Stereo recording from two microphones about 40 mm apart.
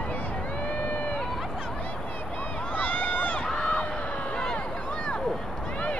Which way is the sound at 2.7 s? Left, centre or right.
Left.